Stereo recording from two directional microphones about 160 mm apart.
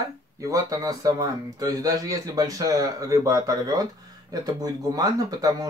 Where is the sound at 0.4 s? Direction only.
20° right (ahead or behind).